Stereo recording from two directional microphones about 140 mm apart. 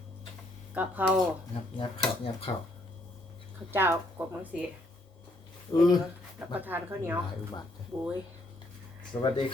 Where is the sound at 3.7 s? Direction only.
15° right (ahead or behind).